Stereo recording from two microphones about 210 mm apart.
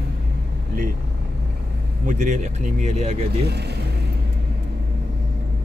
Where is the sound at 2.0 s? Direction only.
35° right (ahead or behind).